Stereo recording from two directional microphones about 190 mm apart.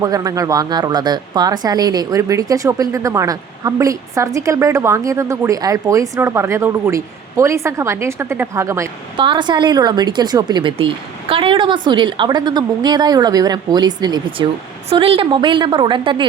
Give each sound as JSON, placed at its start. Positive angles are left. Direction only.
{"t": 0.0, "sound": "a woman's voice", "side_deg": -20}